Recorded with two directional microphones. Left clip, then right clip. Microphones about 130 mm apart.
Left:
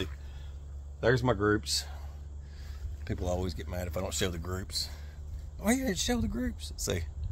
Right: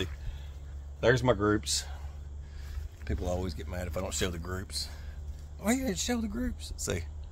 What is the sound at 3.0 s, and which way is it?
Speech, 50° left (ahead or behind).